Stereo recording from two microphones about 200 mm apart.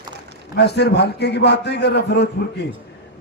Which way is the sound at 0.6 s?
55° left (ahead or behind).